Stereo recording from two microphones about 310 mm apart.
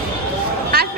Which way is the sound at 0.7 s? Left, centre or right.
Right.